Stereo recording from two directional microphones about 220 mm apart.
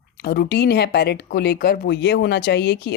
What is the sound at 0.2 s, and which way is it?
Speech, 45° left (ahead or behind).